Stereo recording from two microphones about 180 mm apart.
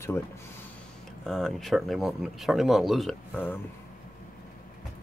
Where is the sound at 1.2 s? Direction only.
Centre (ahead or behind).